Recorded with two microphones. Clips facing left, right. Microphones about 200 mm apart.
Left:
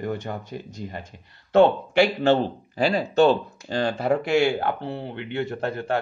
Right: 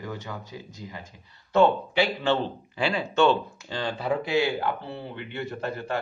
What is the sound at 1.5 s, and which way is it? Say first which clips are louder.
Speech: left 4 dB; 45° left (ahead or behind).